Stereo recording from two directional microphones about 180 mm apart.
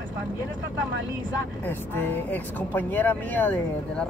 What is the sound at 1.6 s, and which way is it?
Speech, 10° left (ahead or behind).